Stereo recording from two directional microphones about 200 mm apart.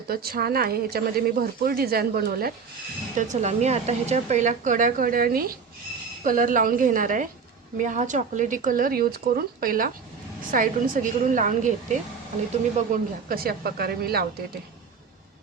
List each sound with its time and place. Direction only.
0.1 s speech: 50° right (ahead or behind)
3.2 s a woman's voice: 35° right (ahead or behind); by 14.3 s 50° right (ahead or behind)